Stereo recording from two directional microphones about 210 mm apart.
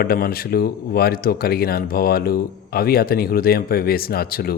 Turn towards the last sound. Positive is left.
turn(degrees=45)  # may be behind; listen again after turning